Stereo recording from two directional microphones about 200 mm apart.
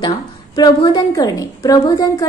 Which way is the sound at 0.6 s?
20° left (ahead or behind).